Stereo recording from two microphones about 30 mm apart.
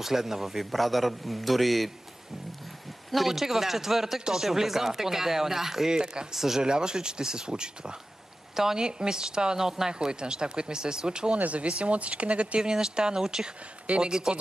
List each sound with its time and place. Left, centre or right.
0.0 s speech: centre
0.7 s a man's voice: centre
3.3 s speech: centre
5.9 s speech: right
6.3 s speech: centre
6.6 s speech: right
9.6 s speech: centre
9.9 s speech: right
11.3 s speech: right
12.6 s speech: right